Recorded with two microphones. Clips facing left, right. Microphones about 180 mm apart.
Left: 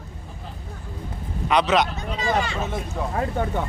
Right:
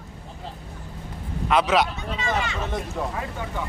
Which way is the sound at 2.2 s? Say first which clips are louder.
Left 3 dB; 35° left (ahead or behind).